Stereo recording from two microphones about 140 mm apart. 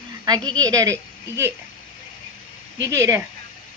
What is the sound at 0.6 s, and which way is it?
Speech, 25° right (ahead or behind).